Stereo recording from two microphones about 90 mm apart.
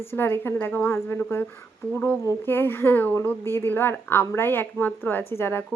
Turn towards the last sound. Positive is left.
turn(degrees=25)  # may be behind; listen again after turning